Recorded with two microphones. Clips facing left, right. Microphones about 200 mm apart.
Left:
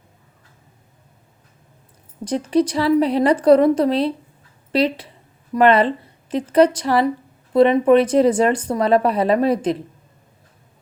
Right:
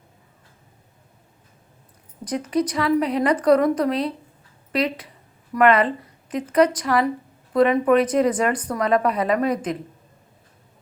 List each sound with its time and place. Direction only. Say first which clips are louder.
2.2 s speech: left 5 dB; 30° left (ahead or behind)